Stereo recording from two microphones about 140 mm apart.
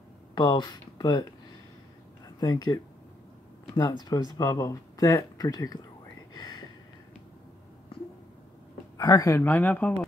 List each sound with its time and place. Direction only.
0.3 s speech: 30° left (ahead or behind)
2.4 s speech: 25° left (ahead or behind)
6.3 s a sound: 30° left (ahead or behind)
8.9 s speech: 25° left (ahead or behind)
9.4 s speech: 15° left (ahead or behind)